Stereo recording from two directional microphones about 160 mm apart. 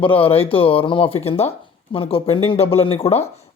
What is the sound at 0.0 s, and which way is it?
Speech, 35° left (ahead or behind).